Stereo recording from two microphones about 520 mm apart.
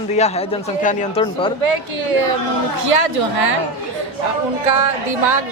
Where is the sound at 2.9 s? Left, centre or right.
Right.